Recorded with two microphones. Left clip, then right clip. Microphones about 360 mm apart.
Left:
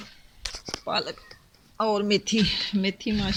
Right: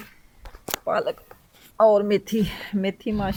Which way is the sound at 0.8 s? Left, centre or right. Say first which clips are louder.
Right 4 dB; centre.